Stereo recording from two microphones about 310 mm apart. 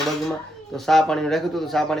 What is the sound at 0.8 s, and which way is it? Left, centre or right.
Speech, centre.